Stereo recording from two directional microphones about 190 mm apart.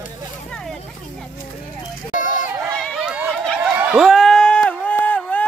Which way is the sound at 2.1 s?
45° left (ahead or behind).